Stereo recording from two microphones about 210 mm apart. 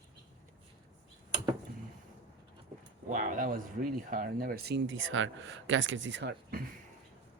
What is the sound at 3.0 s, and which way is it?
Speech, 35° right (ahead or behind).